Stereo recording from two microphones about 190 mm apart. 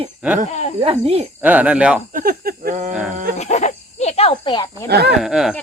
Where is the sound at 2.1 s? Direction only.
50° right (ahead or behind).